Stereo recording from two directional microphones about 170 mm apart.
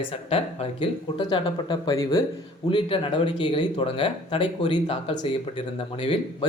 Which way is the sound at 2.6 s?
30° left (ahead or behind).